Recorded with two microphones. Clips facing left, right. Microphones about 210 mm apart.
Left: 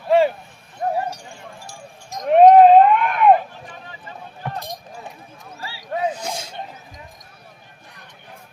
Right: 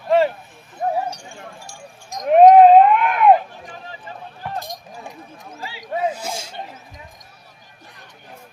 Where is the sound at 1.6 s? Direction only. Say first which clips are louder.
Even; centre (ahead or behind).